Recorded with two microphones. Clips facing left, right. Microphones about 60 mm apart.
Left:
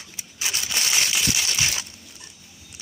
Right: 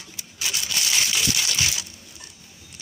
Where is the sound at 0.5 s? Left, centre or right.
Left.